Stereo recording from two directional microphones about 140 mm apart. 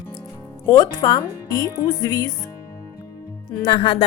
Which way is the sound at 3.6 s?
35° left (ahead or behind).